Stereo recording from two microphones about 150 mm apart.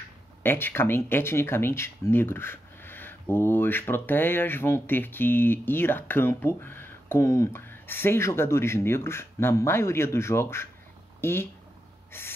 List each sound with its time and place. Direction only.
0.4 s speech: 15° left (ahead or behind)
12.1 s gasp: 15° left (ahead or behind)